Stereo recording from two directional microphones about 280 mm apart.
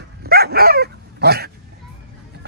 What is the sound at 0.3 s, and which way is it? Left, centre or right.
Dog, right.